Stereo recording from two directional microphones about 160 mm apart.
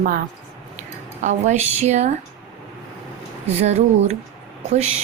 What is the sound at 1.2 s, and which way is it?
Speech, 50° right (ahead or behind).